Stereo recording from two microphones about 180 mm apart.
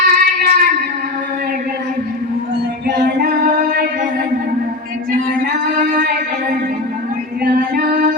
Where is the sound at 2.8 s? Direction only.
60° right (ahead or behind).